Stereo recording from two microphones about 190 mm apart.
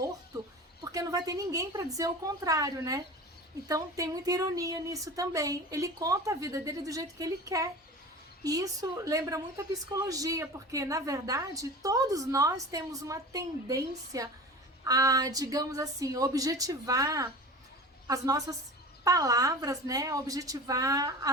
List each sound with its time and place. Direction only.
0.9 s a woman's voice: 20° right (ahead or behind)